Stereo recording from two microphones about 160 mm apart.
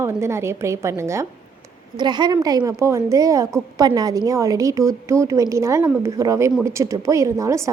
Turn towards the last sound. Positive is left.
turn(degrees=-20)  # may be behind; listen again after turning